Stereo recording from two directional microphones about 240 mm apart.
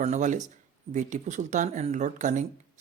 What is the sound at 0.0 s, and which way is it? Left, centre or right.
Speech, right.